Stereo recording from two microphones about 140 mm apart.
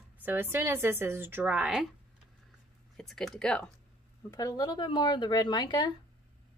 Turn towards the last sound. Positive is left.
turn(degrees=30)  # may be behind; listen again after turning